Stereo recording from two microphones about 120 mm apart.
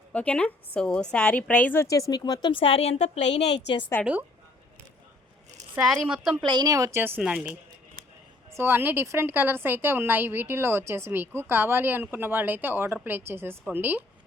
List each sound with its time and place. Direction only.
0.1 s a woman's voice: 10° left (ahead or behind)
1.9 s speech: 30° left (ahead or behind); by 3.5 s 70° left (ahead or behind)
4.0 s a woman's voice: 15° right (ahead or behind)
5.8 s speech: centre (ahead or behind)
6.4 s speech: 40° right (ahead or behind)
7.2 s a woman's voice: 10° right (ahead or behind)
8.4 s a woman's voice: 20° right (ahead or behind)